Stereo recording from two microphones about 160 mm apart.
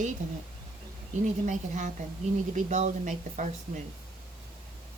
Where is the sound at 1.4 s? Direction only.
50° right (ahead or behind).